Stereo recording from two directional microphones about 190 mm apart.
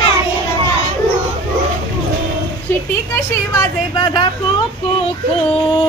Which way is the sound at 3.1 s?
15° left (ahead or behind).